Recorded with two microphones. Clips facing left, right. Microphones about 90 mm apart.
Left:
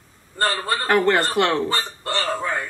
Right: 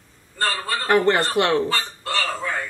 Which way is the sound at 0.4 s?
20° left (ahead or behind).